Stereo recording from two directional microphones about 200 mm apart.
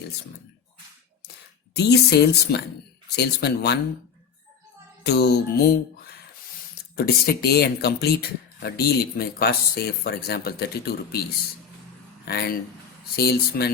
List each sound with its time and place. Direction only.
1.7 s speech: 55° left (ahead or behind)
5.0 s music: 55° left (ahead or behind)
6.9 s speech: 50° left (ahead or behind)
12.3 s speech: 50° left (ahead or behind)